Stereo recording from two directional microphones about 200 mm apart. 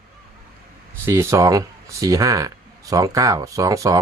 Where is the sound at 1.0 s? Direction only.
15° right (ahead or behind).